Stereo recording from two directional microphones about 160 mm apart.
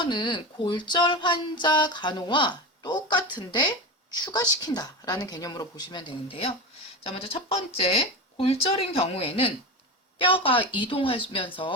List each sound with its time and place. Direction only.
0.0 s speech: 30° left (ahead or behind)